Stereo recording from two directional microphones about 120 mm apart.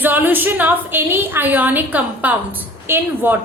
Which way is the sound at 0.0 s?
15° right (ahead or behind).